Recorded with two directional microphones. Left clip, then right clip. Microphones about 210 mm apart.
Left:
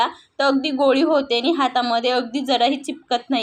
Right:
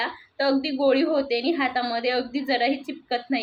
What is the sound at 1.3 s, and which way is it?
Speech, 90° left.